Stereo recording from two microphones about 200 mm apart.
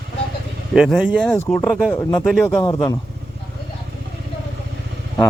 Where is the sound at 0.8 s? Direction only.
5° right (ahead or behind).